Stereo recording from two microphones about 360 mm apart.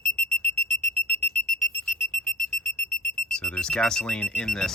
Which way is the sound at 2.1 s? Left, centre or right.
Centre.